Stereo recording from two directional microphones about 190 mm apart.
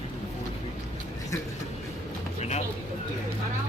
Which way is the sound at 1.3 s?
15° left (ahead or behind).